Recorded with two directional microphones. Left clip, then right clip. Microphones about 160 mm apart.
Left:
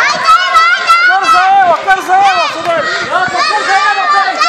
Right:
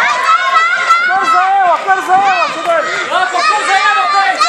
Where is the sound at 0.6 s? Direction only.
50° left (ahead or behind).